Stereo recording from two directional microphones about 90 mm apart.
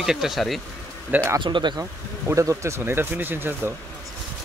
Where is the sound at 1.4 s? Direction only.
60° right (ahead or behind).